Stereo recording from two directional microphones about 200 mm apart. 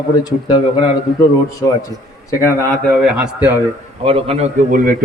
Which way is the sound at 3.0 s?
5° right (ahead or behind).